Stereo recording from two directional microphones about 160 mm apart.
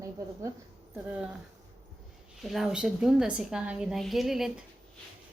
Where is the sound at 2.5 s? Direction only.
Centre (ahead or behind).